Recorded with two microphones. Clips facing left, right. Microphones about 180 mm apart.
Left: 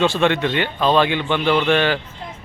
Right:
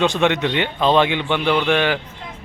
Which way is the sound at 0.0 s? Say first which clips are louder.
Even; 20° right (ahead or behind).